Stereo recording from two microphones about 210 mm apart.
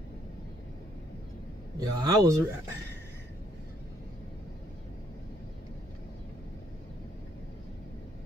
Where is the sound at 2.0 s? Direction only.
15° right (ahead or behind).